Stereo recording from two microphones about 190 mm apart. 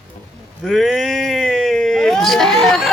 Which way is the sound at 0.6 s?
Centre (ahead or behind).